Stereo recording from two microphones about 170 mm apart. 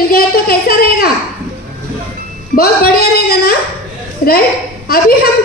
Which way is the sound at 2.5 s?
60° left (ahead or behind).